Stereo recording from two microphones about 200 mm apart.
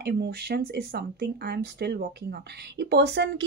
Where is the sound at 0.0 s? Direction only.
55° right (ahead or behind).